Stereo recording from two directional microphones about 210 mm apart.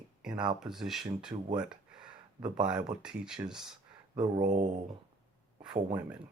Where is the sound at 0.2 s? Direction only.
5° right (ahead or behind).